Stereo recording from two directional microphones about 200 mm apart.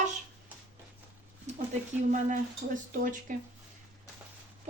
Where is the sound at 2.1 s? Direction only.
40° right (ahead or behind).